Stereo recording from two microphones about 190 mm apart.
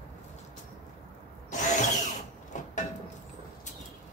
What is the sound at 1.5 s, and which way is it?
Drill, 40° left (ahead or behind).